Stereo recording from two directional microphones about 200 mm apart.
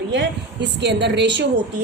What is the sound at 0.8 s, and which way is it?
Speech, 60° right (ahead or behind).